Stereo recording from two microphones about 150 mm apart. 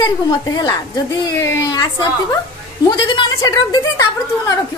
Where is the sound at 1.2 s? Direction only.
25° left (ahead or behind).